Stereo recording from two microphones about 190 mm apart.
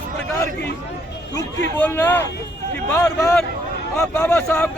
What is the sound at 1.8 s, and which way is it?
Speech, 10° left (ahead or behind).